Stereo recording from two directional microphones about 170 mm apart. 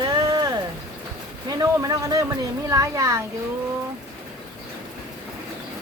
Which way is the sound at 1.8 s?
20° right (ahead or behind).